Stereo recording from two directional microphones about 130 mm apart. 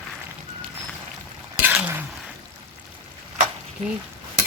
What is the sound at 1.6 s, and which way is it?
Cutlery, 15° right (ahead or behind).